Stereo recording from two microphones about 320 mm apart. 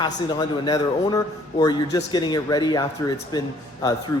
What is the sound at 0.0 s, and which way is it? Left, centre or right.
A man's voice, centre.